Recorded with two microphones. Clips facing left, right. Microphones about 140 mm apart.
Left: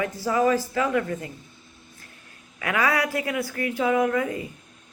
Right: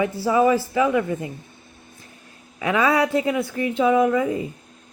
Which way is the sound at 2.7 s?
25° right (ahead or behind).